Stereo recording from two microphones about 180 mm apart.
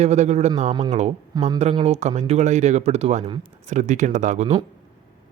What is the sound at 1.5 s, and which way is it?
Speech, 35° right (ahead or behind).